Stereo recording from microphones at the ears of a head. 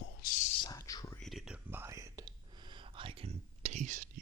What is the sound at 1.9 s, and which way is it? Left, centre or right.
Whispering, right.